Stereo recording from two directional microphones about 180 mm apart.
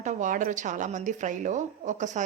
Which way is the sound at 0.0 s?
45° right (ahead or behind).